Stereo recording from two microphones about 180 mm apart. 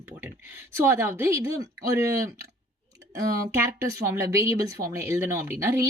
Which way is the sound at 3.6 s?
15° right (ahead or behind).